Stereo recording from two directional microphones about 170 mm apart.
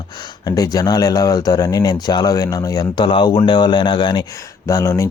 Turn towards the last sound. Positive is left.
turn(degrees=20)  # may be behind; listen again after turning